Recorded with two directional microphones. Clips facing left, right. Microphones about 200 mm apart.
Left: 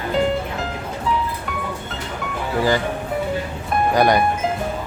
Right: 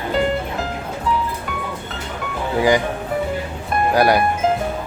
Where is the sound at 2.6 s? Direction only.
15° right (ahead or behind).